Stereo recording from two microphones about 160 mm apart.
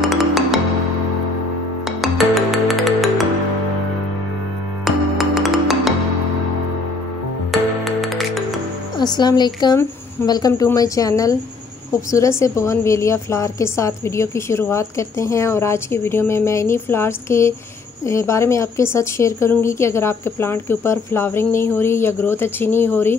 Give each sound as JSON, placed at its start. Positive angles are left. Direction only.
{"t": 0.0, "sound": "music", "side_deg": 0}
{"t": 1.9, "sound": "music", "side_deg": 0}
{"t": 4.8, "sound": "music", "side_deg": 0}
{"t": 7.8, "sound": "music", "side_deg": 0}
{"t": 8.9, "sound": "a woman's voice", "side_deg": 25}